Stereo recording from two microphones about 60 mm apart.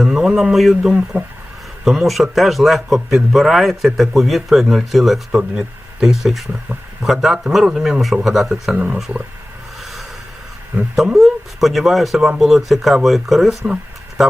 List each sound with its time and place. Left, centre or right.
0.0 s speech: centre
0.8 s speech: centre
8.7 s speech: centre
9.8 s a sound: centre
10.9 s speech: centre